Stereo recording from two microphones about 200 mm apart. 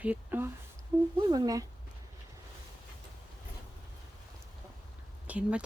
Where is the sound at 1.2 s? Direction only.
20° right (ahead or behind).